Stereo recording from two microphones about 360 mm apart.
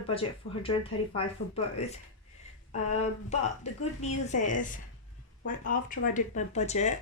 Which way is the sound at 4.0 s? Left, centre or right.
Centre.